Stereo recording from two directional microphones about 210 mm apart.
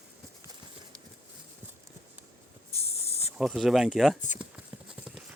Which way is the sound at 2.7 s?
30° left (ahead or behind).